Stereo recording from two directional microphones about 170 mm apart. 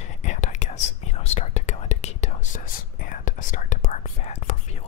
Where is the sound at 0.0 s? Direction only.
45° left (ahead or behind).